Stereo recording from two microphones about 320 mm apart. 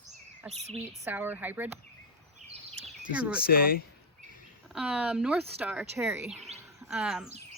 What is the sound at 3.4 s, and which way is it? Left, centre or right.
Speech, left.